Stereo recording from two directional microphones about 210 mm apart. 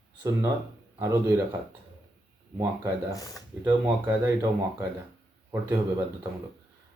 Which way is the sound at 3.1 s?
15° left (ahead or behind).